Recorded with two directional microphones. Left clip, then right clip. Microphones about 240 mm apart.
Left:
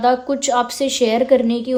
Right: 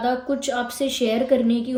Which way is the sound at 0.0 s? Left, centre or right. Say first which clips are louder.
Left 6 dB; left.